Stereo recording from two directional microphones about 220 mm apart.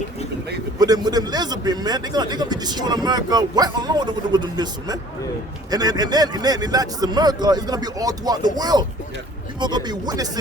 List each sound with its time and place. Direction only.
0.8 s a man's voice: 15° right (ahead or behind)